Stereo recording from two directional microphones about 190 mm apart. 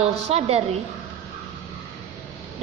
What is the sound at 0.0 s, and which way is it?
Speech, 30° right (ahead or behind).